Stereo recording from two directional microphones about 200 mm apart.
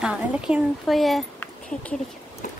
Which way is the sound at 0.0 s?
5° right (ahead or behind).